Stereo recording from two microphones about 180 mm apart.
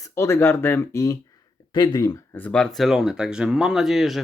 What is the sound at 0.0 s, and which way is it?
Speech, 15° left (ahead or behind).